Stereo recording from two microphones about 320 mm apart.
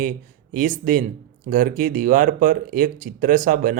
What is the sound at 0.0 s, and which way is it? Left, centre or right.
Speech, right.